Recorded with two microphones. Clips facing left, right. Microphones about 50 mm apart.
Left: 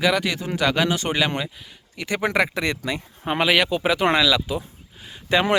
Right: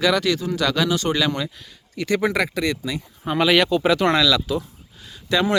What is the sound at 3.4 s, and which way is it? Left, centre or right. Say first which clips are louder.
Speech: right 3 dB; centre.